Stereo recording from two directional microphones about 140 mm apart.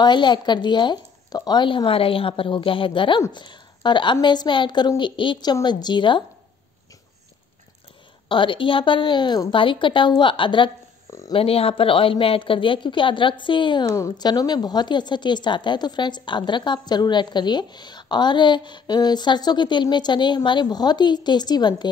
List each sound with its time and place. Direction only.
0.0 s a woman's voice: 35° left (ahead or behind)
8.3 s a woman's voice: 35° left (ahead or behind)
11.1 s a sound: 20° left (ahead or behind)
11.3 s a woman's voice: 45° left (ahead or behind)
13.8 s a woman's voice: 20° left (ahead or behind)